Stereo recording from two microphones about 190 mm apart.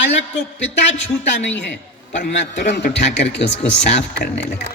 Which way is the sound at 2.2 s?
60° left (ahead or behind).